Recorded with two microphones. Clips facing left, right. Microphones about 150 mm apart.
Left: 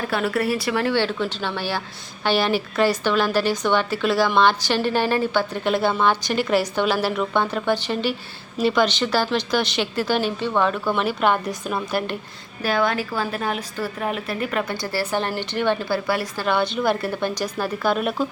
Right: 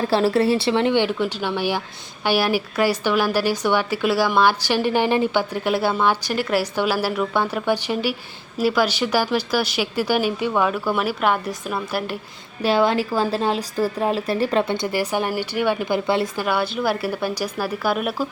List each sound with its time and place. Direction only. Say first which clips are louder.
0.1 s a woman's voice: right 5 dB; 30° right (ahead or behind); by 12.1 s 5° right (ahead or behind)
12.6 s a woman's voice: right 3 dB; 30° right (ahead or behind)
16.5 s a woman's voice: left 4 dB; 5° right (ahead or behind)